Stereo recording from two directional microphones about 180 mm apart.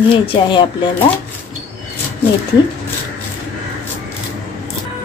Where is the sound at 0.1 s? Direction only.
30° left (ahead or behind).